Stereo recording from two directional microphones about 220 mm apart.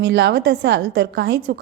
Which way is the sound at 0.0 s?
50° right (ahead or behind).